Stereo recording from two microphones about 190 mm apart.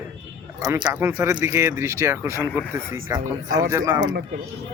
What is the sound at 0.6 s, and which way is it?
Speech, 15° right (ahead or behind).